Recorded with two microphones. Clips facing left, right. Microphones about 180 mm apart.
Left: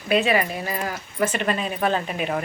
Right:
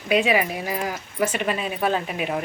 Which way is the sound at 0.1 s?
10° right (ahead or behind).